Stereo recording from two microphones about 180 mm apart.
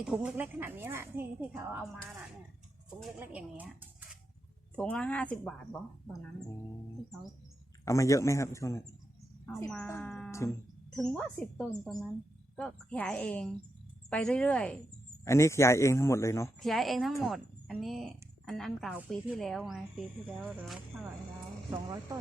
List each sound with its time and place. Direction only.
0.0 s a woman's voice: 5° right (ahead or behind)
3.2 s speech: 10° right (ahead or behind)
4.7 s a man's voice: 5° left (ahead or behind)
7.9 s a man's voice: 15° left (ahead or behind)
16.6 s a woman's voice: centre (ahead or behind)
21.7 s speech: 20° right (ahead or behind)